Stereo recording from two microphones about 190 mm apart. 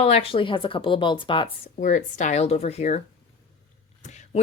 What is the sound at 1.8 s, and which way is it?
Speech, 40° left (ahead or behind).